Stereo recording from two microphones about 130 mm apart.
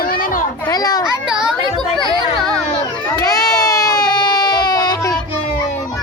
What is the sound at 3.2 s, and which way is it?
Baby cry, 30° left (ahead or behind).